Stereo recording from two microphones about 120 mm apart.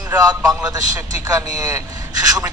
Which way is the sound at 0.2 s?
30° right (ahead or behind).